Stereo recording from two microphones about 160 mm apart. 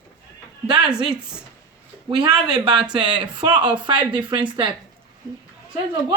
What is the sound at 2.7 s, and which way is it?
Speech, 5° right (ahead or behind).